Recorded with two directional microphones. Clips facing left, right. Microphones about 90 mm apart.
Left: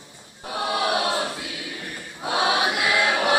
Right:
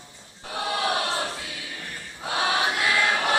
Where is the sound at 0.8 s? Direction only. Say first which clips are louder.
Left 3 dB; 15° left (ahead or behind).